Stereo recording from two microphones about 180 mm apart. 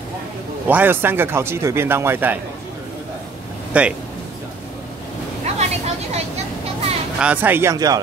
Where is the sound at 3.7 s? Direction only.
5° right (ahead or behind).